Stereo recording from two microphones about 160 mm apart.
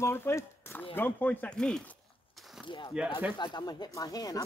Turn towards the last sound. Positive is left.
turn(degrees=25)  # may be behind; listen again after turning